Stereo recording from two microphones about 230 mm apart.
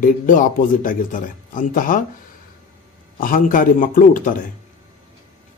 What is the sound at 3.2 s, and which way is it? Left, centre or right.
A man's voice, left.